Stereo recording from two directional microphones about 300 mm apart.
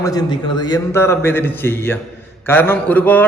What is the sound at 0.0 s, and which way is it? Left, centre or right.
A man's voice, centre.